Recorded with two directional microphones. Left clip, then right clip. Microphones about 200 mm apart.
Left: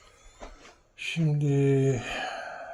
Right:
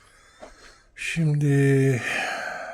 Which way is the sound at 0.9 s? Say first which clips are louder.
Right 4 dB; 30° right (ahead or behind).